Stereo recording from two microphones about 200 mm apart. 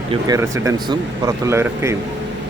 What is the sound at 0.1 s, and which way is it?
Speech, 15° right (ahead or behind).